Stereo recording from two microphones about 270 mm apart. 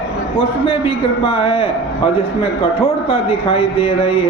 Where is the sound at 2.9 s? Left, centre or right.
Left.